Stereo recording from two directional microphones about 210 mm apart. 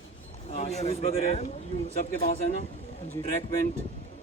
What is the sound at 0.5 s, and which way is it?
Speech, 30° left (ahead or behind).